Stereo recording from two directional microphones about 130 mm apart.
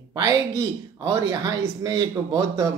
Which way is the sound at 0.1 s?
25° right (ahead or behind).